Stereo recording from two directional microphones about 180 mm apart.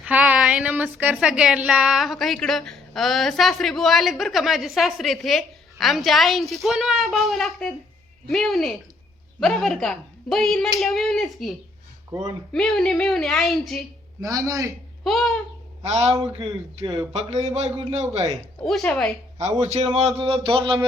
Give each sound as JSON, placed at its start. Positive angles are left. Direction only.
{"t": 0.0, "sound": "a woman's voice", "side_deg": -10}
{"t": 12.5, "sound": "a woman's voice", "side_deg": 0}
{"t": 14.2, "sound": "a man's voice", "side_deg": -20}
{"t": 15.0, "sound": "a woman's voice", "side_deg": 0}
{"t": 15.8, "sound": "a man's voice", "side_deg": -35}
{"t": 16.2, "sound": "speech", "side_deg": -25}
{"t": 17.2, "sound": "a man's voice", "side_deg": -35}
{"t": 18.6, "sound": "a woman's voice", "side_deg": 0}
{"t": 19.4, "sound": "a man's voice", "side_deg": -40}